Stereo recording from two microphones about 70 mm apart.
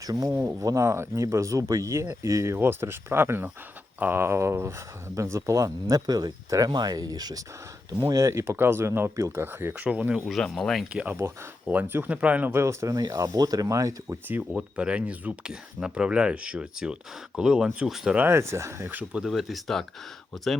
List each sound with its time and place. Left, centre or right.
0.0 s speech: right
0.3 s speech: right
0.6 s speech: right
2.6 s speech: right
7.9 s speech: right
9.8 s speech: centre
10.2 s speech: centre
10.8 s speech: centre
11.7 s speech: right
12.5 s speech: right
13.3 s speech: right
14.5 s speech: centre
18.3 s speech: right
19.1 s speech: centre